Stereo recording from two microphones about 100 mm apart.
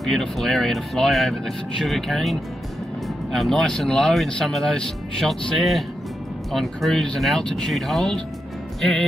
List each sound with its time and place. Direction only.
0.0 s speech: centre (ahead or behind)